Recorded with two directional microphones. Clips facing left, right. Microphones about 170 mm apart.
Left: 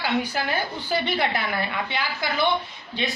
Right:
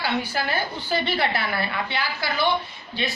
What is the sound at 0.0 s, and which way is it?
A woman's voice, 15° left (ahead or behind).